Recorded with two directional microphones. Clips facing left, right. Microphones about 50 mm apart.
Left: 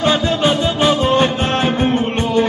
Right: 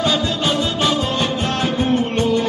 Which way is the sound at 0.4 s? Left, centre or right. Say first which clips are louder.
Left 4 dB; left.